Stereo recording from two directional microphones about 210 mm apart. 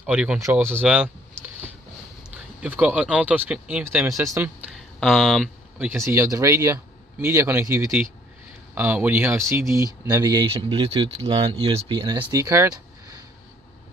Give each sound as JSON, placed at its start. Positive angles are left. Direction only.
{"t": 0.0, "sound": "speech", "side_deg": -5}
{"t": 2.3, "sound": "speech", "side_deg": -5}
{"t": 4.7, "sound": "speech", "side_deg": 0}
{"t": 6.0, "sound": "speech", "side_deg": -15}